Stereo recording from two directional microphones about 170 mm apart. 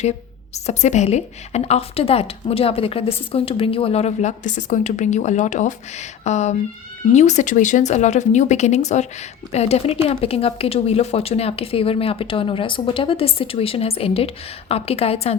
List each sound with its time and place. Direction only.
0.5 s a woman's voice: 40° left (ahead or behind)